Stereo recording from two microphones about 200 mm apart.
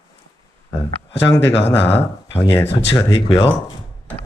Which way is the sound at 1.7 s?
10° left (ahead or behind).